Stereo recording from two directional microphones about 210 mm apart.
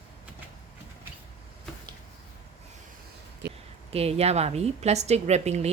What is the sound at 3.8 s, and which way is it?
A woman's voice, 30° right (ahead or behind).